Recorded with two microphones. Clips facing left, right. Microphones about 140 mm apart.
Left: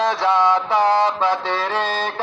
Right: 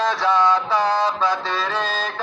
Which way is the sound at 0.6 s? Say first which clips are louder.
Left 3 dB; 15° left (ahead or behind).